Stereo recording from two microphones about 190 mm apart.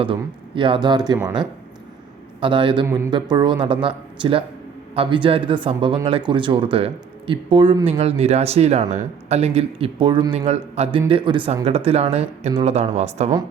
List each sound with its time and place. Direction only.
0.0 s speech: 25° right (ahead or behind)